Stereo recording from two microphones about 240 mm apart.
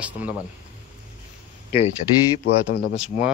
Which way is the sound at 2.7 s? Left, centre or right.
Left.